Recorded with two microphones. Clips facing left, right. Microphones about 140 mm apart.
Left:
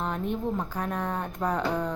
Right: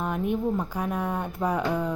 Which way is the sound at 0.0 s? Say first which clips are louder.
Right 3 dB; 10° right (ahead or behind).